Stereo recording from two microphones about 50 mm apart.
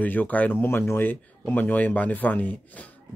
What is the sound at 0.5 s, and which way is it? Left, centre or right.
Speech, left.